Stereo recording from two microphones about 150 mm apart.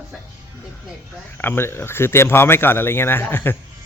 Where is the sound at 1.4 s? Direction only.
15° left (ahead or behind).